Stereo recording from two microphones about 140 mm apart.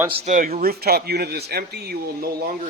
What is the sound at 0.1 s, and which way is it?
Speech, 50° right (ahead or behind).